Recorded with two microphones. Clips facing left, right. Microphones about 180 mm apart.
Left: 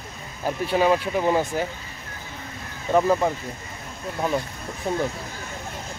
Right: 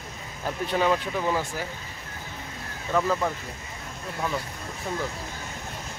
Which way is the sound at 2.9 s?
25° left (ahead or behind).